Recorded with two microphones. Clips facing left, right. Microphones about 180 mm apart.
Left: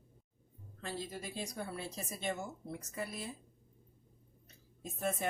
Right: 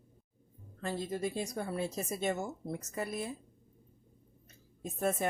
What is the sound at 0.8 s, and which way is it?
Speech, 50° right (ahead or behind).